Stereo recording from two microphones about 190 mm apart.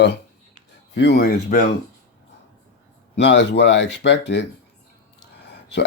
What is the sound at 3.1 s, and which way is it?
Speech, 65° left (ahead or behind).